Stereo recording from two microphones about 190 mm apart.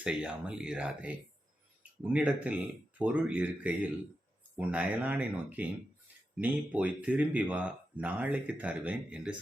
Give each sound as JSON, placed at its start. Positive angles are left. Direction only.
{"t": 0.0, "sound": "speech", "side_deg": -5}